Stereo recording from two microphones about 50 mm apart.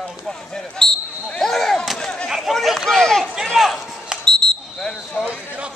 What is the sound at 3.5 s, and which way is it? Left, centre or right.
Chop, centre.